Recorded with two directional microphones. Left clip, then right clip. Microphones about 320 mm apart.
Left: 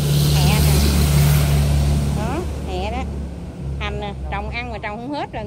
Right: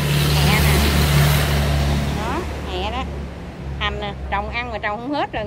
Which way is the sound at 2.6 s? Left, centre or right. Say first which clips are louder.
Right 1 dB; centre.